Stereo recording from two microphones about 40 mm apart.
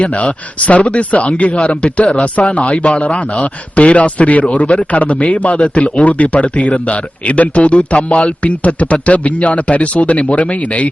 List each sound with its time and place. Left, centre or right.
0.0 s a man's voice: left